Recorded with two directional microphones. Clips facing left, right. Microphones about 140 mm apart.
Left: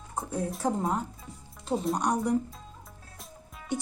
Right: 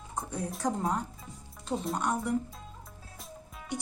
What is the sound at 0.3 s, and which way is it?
Speech, 5° left (ahead or behind).